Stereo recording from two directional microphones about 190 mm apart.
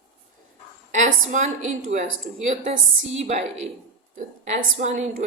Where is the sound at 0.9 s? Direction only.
40° right (ahead or behind).